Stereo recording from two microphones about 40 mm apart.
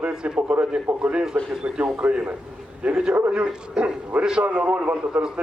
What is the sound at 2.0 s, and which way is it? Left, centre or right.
A man's voice, right.